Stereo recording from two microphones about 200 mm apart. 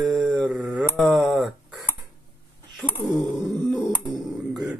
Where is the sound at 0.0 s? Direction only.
Centre (ahead or behind).